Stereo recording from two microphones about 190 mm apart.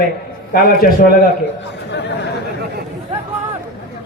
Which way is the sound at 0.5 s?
50° left (ahead or behind).